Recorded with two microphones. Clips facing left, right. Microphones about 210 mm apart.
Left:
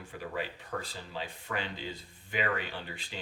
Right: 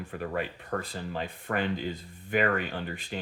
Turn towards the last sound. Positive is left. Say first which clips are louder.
# right 7 dB
turn(degrees=-55)  # may be behind; listen again after turning